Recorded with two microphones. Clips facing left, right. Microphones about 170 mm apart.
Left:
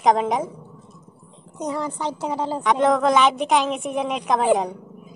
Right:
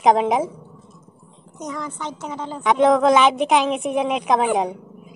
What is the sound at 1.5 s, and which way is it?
A woman's voice, 35° left (ahead or behind).